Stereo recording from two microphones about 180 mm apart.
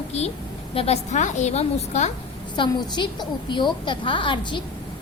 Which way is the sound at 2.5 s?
25° left (ahead or behind).